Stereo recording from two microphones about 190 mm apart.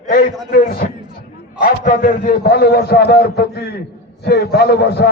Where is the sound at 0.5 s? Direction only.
50° left (ahead or behind).